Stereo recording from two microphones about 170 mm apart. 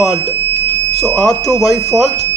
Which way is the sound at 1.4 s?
20° left (ahead or behind).